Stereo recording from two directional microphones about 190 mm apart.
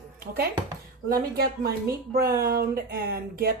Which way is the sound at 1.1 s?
55° right (ahead or behind).